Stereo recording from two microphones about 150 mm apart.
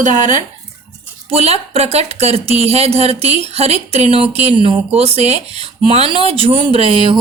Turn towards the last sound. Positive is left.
turn(degrees=-35)  # may be behind; listen again after turning